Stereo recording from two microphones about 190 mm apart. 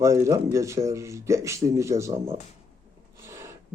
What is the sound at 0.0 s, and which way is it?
A man's voice, 15° right (ahead or behind).